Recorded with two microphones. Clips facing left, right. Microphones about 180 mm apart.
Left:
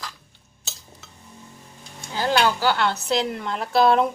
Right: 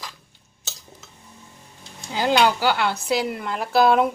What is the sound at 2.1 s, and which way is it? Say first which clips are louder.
Speech: right 2 dB; 15° right (ahead or behind).